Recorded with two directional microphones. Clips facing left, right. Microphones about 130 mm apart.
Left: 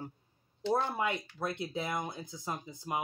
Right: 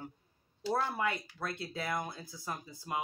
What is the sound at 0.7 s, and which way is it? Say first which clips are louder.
Speech: even; 20° left (ahead or behind).